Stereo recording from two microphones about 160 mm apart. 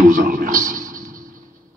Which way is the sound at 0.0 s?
55° right (ahead or behind).